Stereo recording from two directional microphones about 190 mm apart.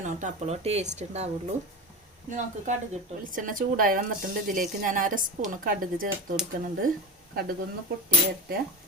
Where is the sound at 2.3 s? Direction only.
40° right (ahead or behind).